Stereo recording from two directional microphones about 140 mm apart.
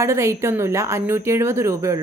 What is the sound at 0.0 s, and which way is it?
A woman's voice, 20° right (ahead or behind).